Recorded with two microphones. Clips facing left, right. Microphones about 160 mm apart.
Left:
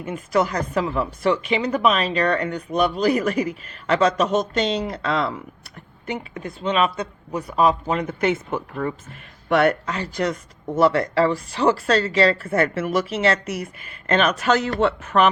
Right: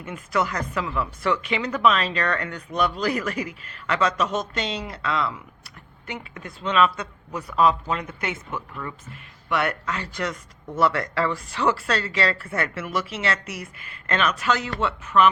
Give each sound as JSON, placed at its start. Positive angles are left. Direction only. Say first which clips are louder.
{"t": 0.0, "sound": "a woman's voice", "louder": "left 4 dB", "side_deg": 35}
{"t": 1.7, "sound": "speech", "louder": "even", "side_deg": 15}
{"t": 3.2, "sound": "a woman's voice", "louder": "left 6 dB", "side_deg": 30}
{"t": 4.8, "sound": "a woman's voice", "louder": "left 4 dB", "side_deg": 35}
{"t": 6.7, "sound": "a woman's voice", "louder": "even", "side_deg": 25}
{"t": 8.4, "sound": "a woman's voice", "louder": "left 7 dB", "side_deg": 45}
{"t": 14.8, "sound": "speech", "louder": "left 4 dB", "side_deg": 60}